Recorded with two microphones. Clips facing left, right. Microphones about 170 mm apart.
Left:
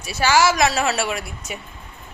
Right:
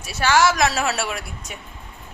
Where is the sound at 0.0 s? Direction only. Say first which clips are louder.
Left 1 dB; centre (ahead or behind).